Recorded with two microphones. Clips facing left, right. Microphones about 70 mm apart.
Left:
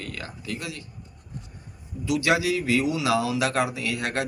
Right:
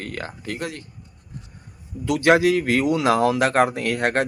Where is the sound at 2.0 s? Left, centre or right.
Right.